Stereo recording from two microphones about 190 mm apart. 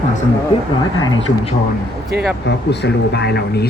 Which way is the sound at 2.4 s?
65° left (ahead or behind).